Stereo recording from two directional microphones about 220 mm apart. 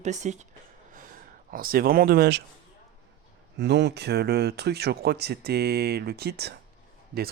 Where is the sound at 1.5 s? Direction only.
40° right (ahead or behind).